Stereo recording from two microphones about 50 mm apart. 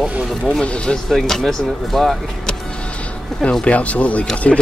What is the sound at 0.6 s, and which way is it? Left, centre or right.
Speech, left.